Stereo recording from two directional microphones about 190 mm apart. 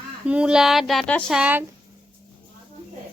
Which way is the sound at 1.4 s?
10° right (ahead or behind).